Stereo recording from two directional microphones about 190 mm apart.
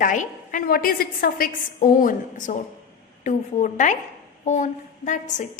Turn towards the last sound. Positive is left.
turn(degrees=40)  # may be behind; listen again after turning